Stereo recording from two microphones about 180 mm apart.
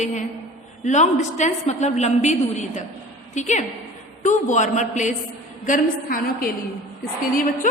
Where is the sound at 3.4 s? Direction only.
40° left (ahead or behind).